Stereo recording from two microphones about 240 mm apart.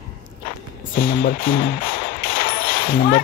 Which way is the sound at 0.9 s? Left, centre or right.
Left.